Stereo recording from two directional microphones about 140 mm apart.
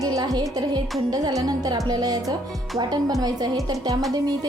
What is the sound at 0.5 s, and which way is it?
A woman's voice, 30° right (ahead or behind).